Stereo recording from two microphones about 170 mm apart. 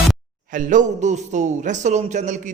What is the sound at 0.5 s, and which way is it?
A man's voice, 50° right (ahead or behind).